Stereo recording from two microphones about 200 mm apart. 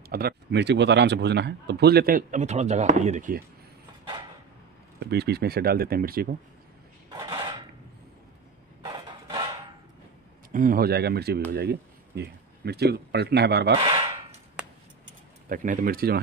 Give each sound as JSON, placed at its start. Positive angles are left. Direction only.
{"t": 0.1, "sound": "speech", "side_deg": -50}
{"t": 5.0, "sound": "speech", "side_deg": -55}
{"t": 10.5, "sound": "speech", "side_deg": -45}
{"t": 13.7, "sound": "a sound", "side_deg": -30}
{"t": 14.6, "sound": "a sound", "side_deg": -5}
{"t": 15.4, "sound": "speech", "side_deg": -40}